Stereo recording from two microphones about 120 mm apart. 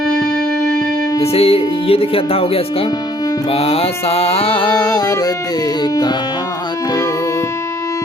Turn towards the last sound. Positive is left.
turn(degrees=25)  # may be behind; listen again after turning